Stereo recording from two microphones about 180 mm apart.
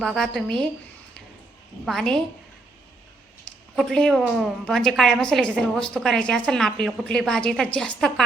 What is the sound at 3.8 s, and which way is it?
A woman's voice, 5° left (ahead or behind).